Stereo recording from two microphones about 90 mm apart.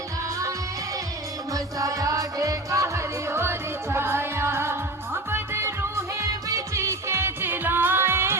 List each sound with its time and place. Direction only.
1.5 s music: 40° right (ahead or behind)